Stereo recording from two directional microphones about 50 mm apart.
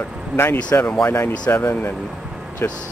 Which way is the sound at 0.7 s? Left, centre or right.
Left.